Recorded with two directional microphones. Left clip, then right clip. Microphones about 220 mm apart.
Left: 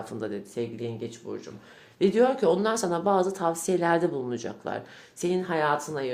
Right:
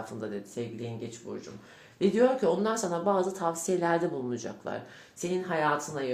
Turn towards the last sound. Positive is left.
turn(degrees=40)  # may be behind; listen again after turning